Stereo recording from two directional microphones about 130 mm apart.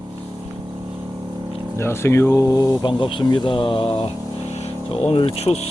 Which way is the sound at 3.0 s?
40° left (ahead or behind).